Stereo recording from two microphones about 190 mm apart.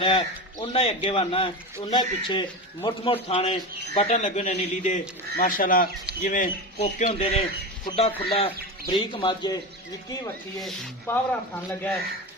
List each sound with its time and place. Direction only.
0.6 s a man's voice: 30° left (ahead or behind); by 6.5 s 50° left (ahead or behind)
6.7 s a man's voice: 35° left (ahead or behind)
11.0 s speech: 10° left (ahead or behind)